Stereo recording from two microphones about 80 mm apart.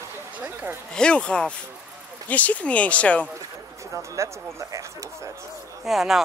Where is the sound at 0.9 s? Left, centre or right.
Centre.